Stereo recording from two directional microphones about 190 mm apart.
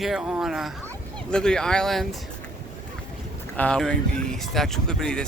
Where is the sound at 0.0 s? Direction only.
Centre (ahead or behind).